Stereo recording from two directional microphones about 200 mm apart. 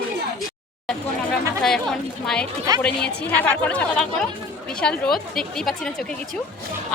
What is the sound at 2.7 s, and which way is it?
Speech, 20° right (ahead or behind).